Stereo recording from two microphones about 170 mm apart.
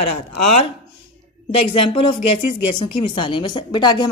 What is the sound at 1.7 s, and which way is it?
A woman's voice, 30° left (ahead or behind).